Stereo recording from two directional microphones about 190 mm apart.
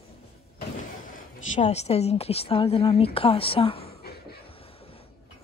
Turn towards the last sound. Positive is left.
turn(degrees=30)  # may be behind; listen again after turning